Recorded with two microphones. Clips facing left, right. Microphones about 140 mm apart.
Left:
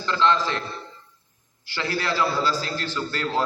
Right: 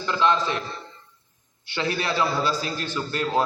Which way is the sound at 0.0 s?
15° right (ahead or behind).